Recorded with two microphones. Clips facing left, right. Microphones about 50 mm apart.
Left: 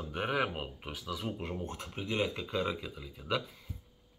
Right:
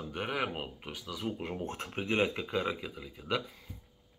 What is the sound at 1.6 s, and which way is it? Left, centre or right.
Speech, right.